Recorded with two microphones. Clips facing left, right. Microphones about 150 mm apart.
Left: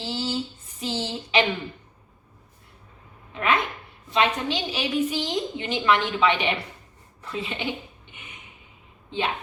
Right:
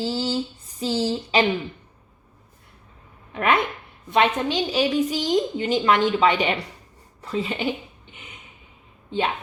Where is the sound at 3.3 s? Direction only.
55° right (ahead or behind).